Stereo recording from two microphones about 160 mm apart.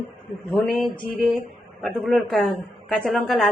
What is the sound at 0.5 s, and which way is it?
Speech, centre (ahead or behind).